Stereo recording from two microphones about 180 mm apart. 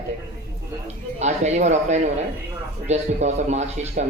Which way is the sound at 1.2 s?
40° right (ahead or behind).